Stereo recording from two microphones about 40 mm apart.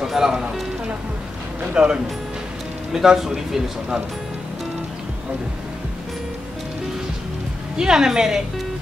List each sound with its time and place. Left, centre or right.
0.0 s speech: centre
1.8 s a man's voice: centre
7.7 s a man's voice: centre